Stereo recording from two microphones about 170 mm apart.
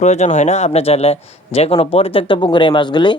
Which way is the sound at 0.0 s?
40° left (ahead or behind).